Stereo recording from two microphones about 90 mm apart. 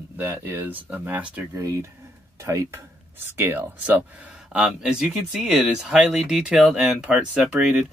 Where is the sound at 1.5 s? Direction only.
35° right (ahead or behind).